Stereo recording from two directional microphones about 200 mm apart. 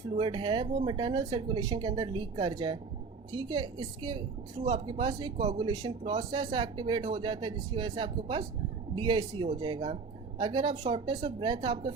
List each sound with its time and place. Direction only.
0.2 s a woman's voice: 25° right (ahead or behind)